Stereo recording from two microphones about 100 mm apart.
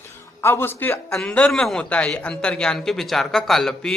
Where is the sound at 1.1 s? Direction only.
10° left (ahead or behind).